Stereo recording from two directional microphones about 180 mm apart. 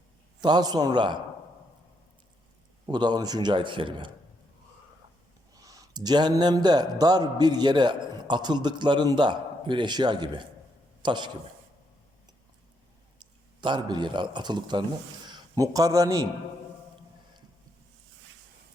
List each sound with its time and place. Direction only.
0.4 s a man's voice: 25° right (ahead or behind)
2.8 s a man's voice: 25° right (ahead or behind)
5.5 s a man's voice: 20° right (ahead or behind)
13.6 s a man's voice: 25° right (ahead or behind)